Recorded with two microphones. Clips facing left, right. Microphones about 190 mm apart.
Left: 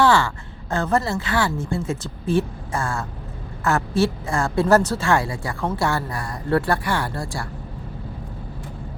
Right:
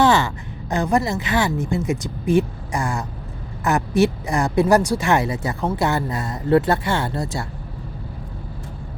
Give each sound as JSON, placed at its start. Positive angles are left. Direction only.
{"t": 0.0, "sound": "a woman's voice", "side_deg": -20}